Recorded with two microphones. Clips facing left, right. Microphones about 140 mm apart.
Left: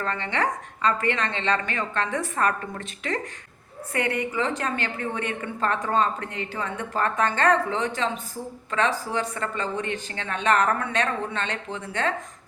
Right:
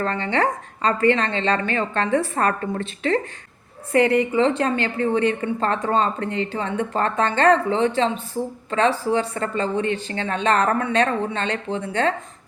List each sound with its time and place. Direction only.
0.0 s a woman's voice: 35° right (ahead or behind)